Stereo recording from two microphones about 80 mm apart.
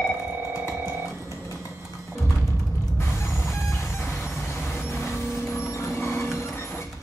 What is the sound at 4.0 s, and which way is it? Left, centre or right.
Vehicle, left.